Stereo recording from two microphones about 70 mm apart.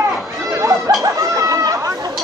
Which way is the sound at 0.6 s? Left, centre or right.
Right.